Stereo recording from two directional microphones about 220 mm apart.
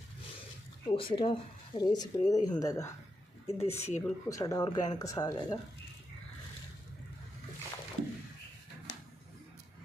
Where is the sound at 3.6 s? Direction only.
30° left (ahead or behind).